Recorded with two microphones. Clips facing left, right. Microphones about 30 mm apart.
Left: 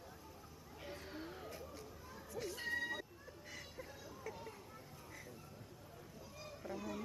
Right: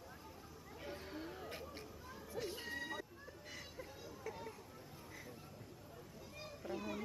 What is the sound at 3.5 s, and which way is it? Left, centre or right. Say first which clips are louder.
Music: even; centre.